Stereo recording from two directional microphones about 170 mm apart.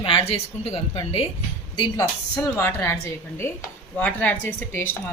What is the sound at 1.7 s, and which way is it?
A woman's voice, 25° left (ahead or behind).